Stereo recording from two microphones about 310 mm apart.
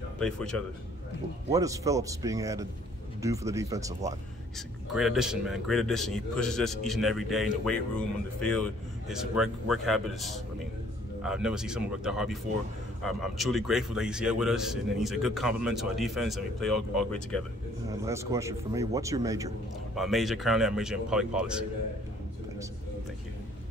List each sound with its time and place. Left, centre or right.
0.2 s a man's voice: centre
1.5 s a man's voice: centre
17.8 s speech: centre
20.0 s a man's voice: centre